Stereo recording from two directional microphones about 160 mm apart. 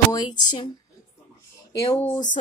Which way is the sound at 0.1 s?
25° left (ahead or behind).